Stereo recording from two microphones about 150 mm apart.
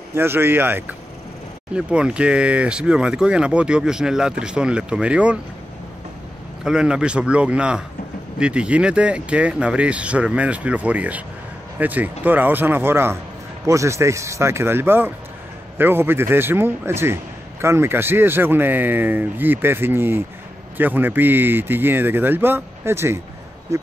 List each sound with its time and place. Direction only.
0.1 s a man's voice: 15° right (ahead or behind)
6.6 s a man's voice: 5° right (ahead or behind)